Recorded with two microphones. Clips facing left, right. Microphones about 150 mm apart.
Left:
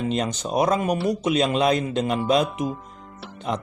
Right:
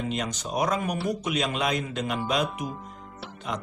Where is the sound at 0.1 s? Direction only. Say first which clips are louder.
Left 6 dB; 30° left (ahead or behind).